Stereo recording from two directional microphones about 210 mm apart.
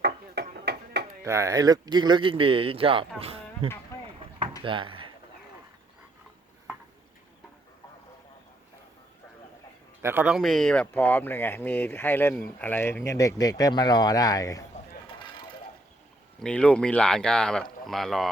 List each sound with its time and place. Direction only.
0.0 s chop: 50° right (ahead or behind)
1.2 s speech: 15° right (ahead or behind)
3.9 s a sound: 15° left (ahead or behind)
4.6 s drawer open or close: 25° right (ahead or behind)
10.0 s speech: 10° right (ahead or behind); by 14.7 s 15° left (ahead or behind)
16.4 s speech: 5° left (ahead or behind)